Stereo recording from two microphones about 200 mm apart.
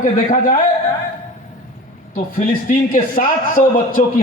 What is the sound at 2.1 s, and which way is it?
A man's voice, 40° left (ahead or behind).